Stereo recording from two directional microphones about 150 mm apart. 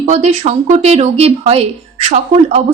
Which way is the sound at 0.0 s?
50° right (ahead or behind).